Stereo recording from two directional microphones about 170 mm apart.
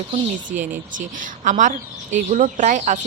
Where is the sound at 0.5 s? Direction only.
50° right (ahead or behind).